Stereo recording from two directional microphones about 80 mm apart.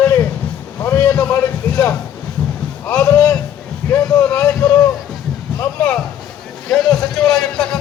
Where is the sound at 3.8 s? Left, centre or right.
Left.